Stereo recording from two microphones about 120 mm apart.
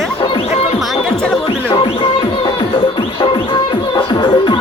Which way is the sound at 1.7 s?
50° left (ahead or behind).